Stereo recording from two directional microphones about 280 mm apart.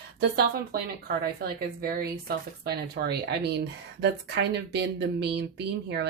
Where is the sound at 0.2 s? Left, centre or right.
Right.